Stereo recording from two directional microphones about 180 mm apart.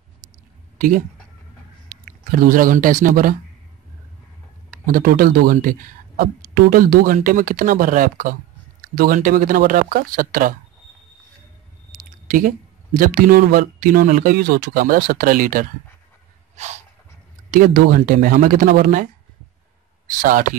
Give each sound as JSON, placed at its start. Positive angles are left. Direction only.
{"t": 0.7, "sound": "speech", "side_deg": -50}
{"t": 4.8, "sound": "speech", "side_deg": -50}
{"t": 11.9, "sound": "speech", "side_deg": -50}
{"t": 16.5, "sound": "snort", "side_deg": -40}
{"t": 17.5, "sound": "speech", "side_deg": -50}
{"t": 20.2, "sound": "speech", "side_deg": -50}